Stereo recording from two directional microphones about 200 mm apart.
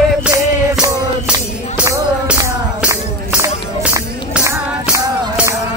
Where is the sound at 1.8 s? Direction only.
10° right (ahead or behind).